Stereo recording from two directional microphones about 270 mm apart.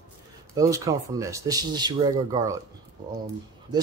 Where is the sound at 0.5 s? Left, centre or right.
Centre.